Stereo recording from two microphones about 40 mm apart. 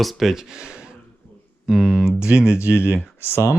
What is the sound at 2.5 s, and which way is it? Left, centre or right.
Speech, left.